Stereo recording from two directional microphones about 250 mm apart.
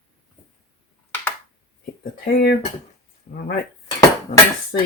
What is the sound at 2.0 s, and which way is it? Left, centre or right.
Speech, left.